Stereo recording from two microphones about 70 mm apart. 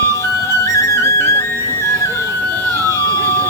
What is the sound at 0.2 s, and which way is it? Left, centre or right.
Flute, left.